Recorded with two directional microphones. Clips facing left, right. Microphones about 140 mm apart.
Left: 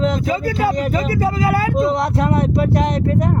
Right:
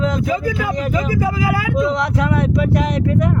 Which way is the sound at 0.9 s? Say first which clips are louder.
Even; 70° left (ahead or behind).